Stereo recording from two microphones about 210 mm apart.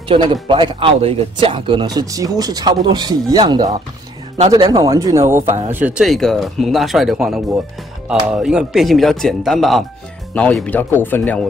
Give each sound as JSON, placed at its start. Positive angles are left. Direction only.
{"t": 0.1, "sound": "speech", "side_deg": -20}